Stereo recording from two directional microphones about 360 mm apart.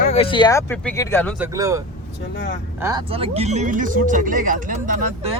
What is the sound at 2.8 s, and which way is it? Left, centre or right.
Speech, centre.